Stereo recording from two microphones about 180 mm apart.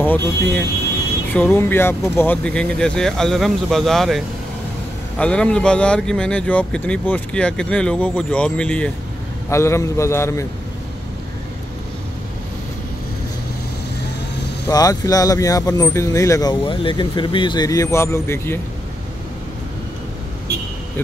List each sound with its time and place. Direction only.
0.0 s a man's voice: 10° left (ahead or behind)
14.7 s speech: 20° left (ahead or behind)